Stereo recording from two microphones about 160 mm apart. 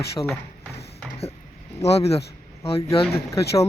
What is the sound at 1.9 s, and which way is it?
Speech, 40° left (ahead or behind).